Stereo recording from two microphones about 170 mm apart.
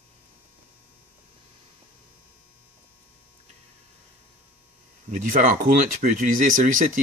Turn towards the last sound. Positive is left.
turn(degrees=-50)  # may be behind; listen again after turning